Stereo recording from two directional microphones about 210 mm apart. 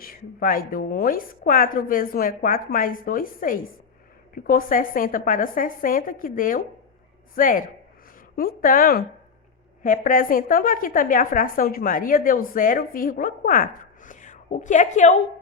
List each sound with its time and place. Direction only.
0.0 s a woman's voice: 45° left (ahead or behind)